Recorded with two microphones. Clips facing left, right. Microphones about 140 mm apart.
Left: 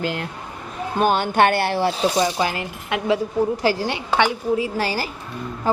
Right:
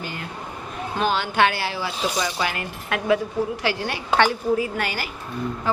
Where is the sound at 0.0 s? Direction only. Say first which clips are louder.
Left 8 dB; 90° left.